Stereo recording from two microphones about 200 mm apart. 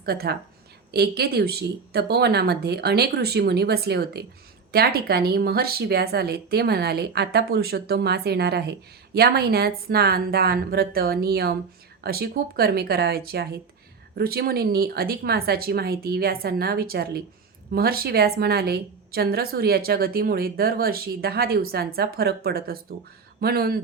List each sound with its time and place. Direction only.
0.0 s a woman's voice: 50° right (ahead or behind)